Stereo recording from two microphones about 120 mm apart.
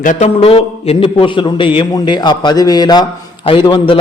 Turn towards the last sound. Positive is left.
turn(degrees=40)  # may be behind; listen again after turning